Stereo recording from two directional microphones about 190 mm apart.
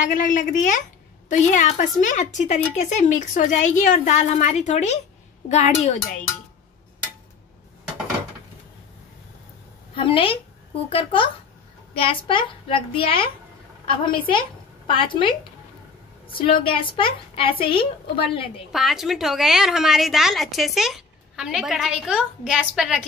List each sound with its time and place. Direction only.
0.0 s a woman's voice: 45° left (ahead or behind)
9.9 s a woman's voice: 25° left (ahead or behind)
18.7 s a woman's voice: centre (ahead or behind)